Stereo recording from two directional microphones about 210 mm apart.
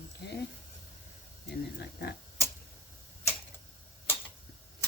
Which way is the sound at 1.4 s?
50° left (ahead or behind).